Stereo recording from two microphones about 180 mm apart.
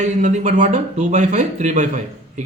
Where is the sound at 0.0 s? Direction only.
40° right (ahead or behind).